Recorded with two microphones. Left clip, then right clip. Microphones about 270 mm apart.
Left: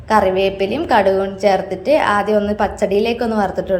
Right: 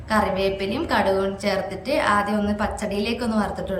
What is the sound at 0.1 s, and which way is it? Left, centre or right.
A woman's voice, centre.